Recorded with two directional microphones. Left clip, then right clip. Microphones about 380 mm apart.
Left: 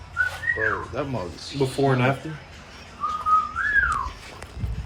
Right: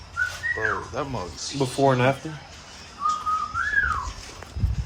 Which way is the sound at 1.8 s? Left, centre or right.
Right.